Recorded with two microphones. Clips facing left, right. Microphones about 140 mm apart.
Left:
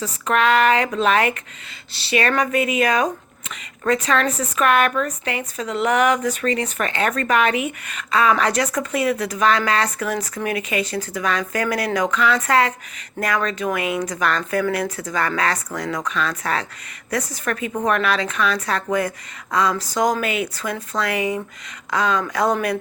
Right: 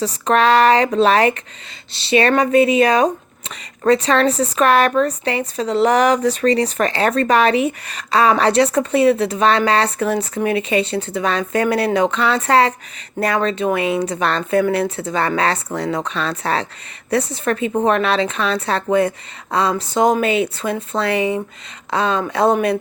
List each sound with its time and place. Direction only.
0.0 s a woman's voice: 35° right (ahead or behind)